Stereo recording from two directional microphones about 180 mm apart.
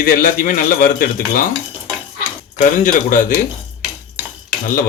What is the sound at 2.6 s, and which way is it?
Speech, 45° left (ahead or behind).